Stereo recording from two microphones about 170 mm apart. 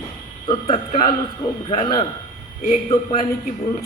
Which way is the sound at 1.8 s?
25° left (ahead or behind).